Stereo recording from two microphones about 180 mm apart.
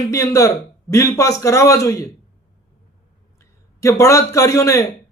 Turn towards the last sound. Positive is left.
turn(degrees=15)  # may be behind; listen again after turning